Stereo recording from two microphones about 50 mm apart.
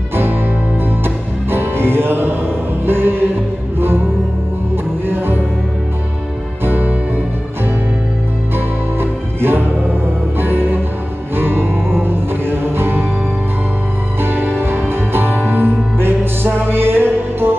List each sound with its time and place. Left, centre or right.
0.1 s music: right
5.0 s music: right
6.6 s music: right
8.5 s music: right
14.2 s music: right